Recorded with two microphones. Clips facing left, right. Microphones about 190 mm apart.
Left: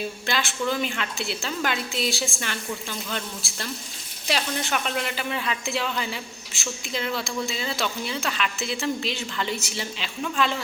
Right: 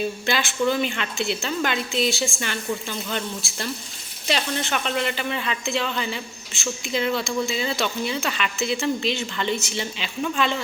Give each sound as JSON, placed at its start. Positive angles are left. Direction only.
{"t": 0.3, "sound": "speech", "side_deg": 0}